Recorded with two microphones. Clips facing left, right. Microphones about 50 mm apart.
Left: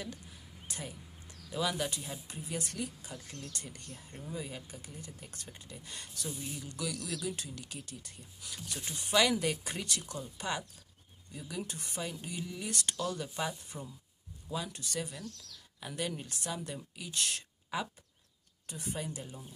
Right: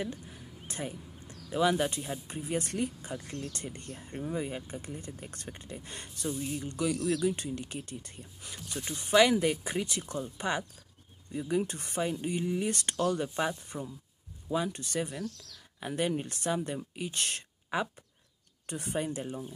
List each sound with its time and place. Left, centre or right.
0.0 s a sound: right
2.2 s speech: right
6.2 s speech: centre
6.6 s speech: right
8.7 s speech: centre; by 12.1 s right
12.1 s speech: right
18.7 s speech: right